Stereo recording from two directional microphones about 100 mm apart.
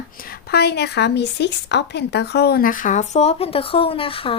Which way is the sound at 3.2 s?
85° left.